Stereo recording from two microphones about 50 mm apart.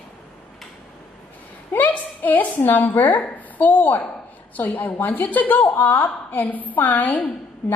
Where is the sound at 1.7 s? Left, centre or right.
Left.